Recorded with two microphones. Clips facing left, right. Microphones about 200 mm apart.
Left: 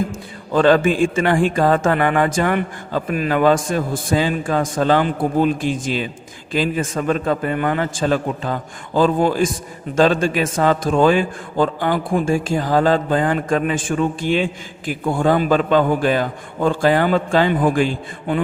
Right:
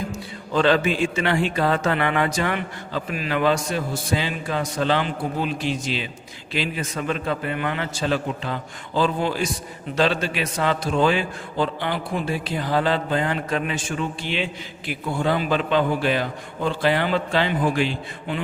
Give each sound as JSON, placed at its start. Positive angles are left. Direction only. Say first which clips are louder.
{"t": 0.0, "sound": "a man's voice", "louder": "left 6 dB", "side_deg": 50}